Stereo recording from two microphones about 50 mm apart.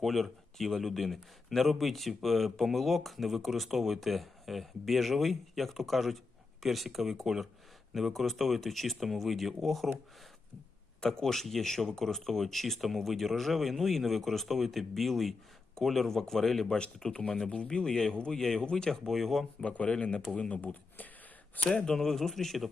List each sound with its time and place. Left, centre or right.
0.0 s speech: centre
11.0 s speech: centre
19.6 s speech: left
21.8 s speech: centre